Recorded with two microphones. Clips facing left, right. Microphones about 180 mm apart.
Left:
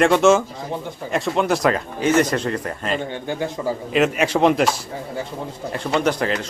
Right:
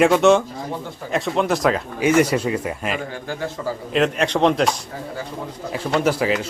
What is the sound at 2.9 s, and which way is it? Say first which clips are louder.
Speech: left 3 dB; 25° left (ahead or behind).